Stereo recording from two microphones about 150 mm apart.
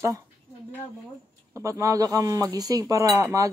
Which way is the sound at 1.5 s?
20° right (ahead or behind).